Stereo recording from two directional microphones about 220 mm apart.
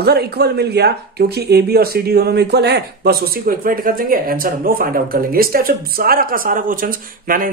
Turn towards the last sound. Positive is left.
turn(degrees=-40)  # may be behind; listen again after turning